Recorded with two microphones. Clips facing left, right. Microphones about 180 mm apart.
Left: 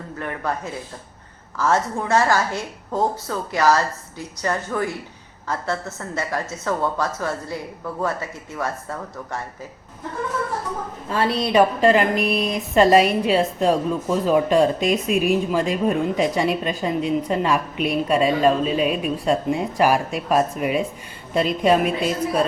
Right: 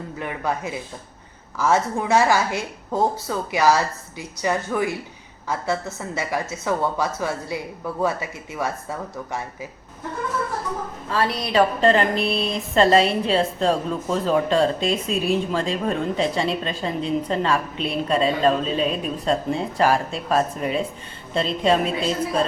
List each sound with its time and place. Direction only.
0.2 s a woman's voice: 10° right (ahead or behind)
11.1 s a woman's voice: 25° left (ahead or behind)
11.5 s a woman's voice: 10° left (ahead or behind)
12.1 s speech: 30° right (ahead or behind)
12.5 s a woman's voice: 15° left (ahead or behind)